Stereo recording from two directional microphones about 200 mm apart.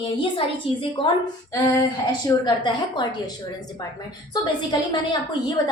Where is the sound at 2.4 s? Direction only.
20° left (ahead or behind).